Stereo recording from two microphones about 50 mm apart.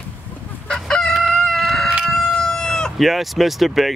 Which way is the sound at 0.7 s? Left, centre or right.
Centre.